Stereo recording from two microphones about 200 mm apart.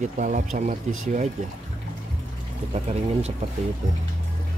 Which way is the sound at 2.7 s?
30° right (ahead or behind).